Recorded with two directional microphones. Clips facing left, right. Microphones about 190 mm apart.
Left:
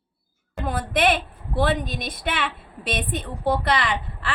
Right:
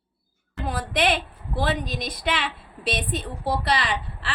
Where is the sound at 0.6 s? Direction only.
50° left (ahead or behind).